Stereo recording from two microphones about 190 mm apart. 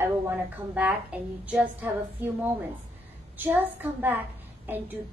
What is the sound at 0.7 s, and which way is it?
Speech, 5° right (ahead or behind).